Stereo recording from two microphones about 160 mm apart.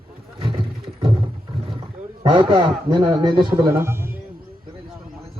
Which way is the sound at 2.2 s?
30° right (ahead or behind).